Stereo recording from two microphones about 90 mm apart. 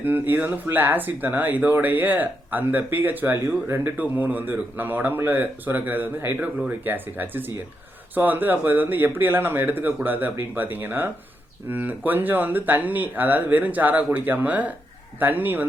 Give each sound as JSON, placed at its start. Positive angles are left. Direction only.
{"t": 0.0, "sound": "speech", "side_deg": -20}